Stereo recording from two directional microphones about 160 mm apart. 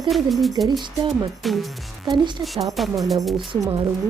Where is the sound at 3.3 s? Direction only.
30° right (ahead or behind).